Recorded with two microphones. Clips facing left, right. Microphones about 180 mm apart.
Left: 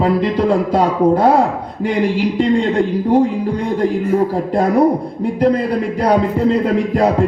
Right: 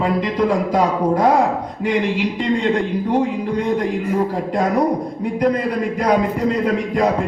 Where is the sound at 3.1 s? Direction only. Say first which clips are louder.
Left 4 dB; 30° left (ahead or behind).